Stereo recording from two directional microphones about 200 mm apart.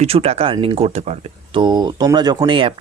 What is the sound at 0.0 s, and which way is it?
Speech, 30° right (ahead or behind).